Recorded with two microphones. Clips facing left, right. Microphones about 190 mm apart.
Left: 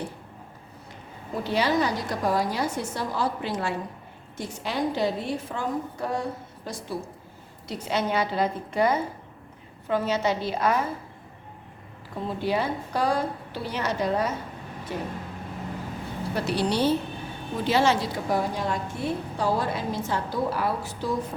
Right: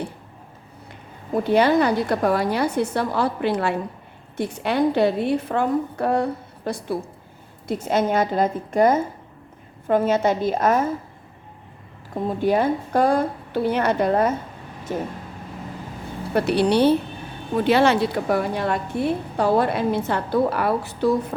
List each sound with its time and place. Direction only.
1.3 s a woman's voice: 55° right (ahead or behind)
7.7 s a woman's voice: 50° right (ahead or behind)
12.1 s a woman's voice: 50° right (ahead or behind)
16.3 s a woman's voice: 60° right (ahead or behind)